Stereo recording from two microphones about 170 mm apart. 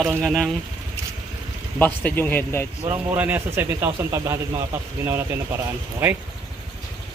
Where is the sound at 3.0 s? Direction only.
10° right (ahead or behind).